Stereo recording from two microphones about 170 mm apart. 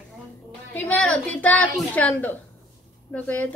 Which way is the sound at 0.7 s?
10° left (ahead or behind).